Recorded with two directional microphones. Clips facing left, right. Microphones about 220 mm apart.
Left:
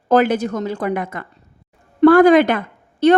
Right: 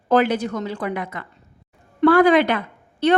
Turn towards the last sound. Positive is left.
turn(degrees=45)  # may be behind; listen again after turning